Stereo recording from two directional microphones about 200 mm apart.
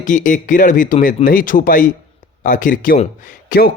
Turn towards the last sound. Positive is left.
turn(degrees=40)  # may be behind; listen again after turning